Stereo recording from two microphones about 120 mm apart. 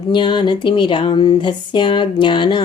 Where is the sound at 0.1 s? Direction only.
40° left (ahead or behind).